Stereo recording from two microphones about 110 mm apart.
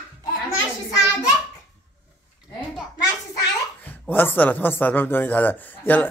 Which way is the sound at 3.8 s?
20° left (ahead or behind).